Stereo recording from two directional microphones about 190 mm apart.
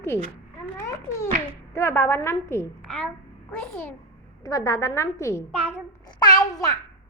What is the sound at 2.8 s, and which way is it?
A woman's voice, centre (ahead or behind).